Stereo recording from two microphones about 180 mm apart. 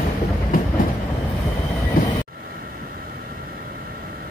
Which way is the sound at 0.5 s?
50° left (ahead or behind).